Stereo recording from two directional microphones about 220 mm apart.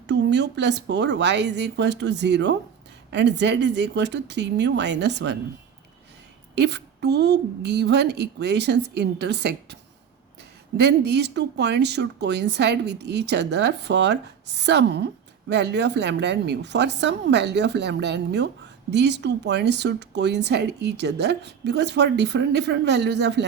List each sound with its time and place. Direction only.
0.1 s speech: 50° right (ahead or behind)
6.6 s speech: 50° right (ahead or behind)
10.8 s speech: 50° right (ahead or behind)